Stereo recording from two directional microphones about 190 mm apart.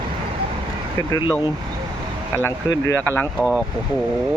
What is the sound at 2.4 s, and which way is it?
Speech, 15° left (ahead or behind).